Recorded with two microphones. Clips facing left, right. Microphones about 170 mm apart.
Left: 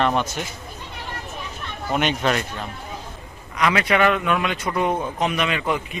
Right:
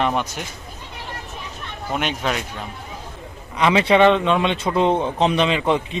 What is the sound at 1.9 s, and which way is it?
Speech, centre (ahead or behind).